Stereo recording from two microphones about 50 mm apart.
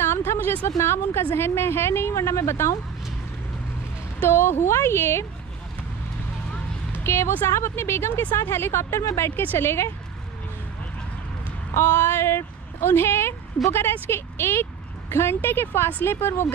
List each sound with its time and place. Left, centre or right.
0.0 s a sound: left
0.7 s a woman's voice: left
4.3 s a woman's voice: left
7.0 s a woman's voice: left
9.3 s speech: left
9.6 s a woman's voice: left
11.7 s speech: left